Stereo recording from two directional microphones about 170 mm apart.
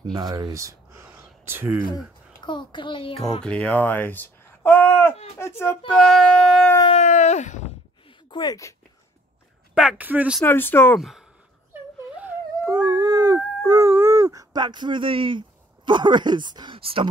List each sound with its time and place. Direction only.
0.1 s speech: 20° right (ahead or behind)
2.4 s a child's voice: 30° left (ahead or behind)
3.4 s speech: 5° left (ahead or behind)
6.9 s a sound: 40° left (ahead or behind)
8.3 s speech: 25° left (ahead or behind)
9.8 s speech: 5° right (ahead or behind)
10.4 s speech: 10° left (ahead or behind)
11.0 s speech: centre (ahead or behind)
12.2 s dog: 15° right (ahead or behind)
13.7 s speech: 15° right (ahead or behind); by 17.1 s 30° right (ahead or behind)